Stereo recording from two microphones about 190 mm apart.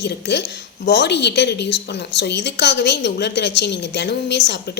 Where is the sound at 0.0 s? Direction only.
65° left (ahead or behind).